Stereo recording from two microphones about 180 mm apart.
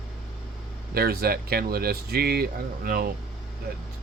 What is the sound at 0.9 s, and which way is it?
Speech, 60° right (ahead or behind).